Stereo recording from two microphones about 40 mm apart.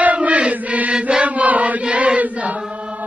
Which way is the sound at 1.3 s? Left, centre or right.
Right.